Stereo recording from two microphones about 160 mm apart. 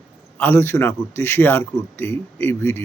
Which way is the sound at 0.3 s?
15° left (ahead or behind).